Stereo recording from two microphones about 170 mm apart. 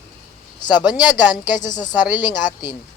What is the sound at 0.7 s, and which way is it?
Speech, 25° left (ahead or behind).